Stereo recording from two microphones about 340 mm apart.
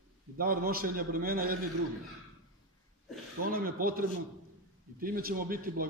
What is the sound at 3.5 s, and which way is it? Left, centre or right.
A man's voice, right.